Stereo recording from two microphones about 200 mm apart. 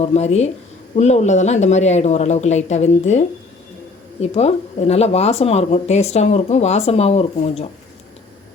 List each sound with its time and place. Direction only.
0.0 s speech: 30° left (ahead or behind)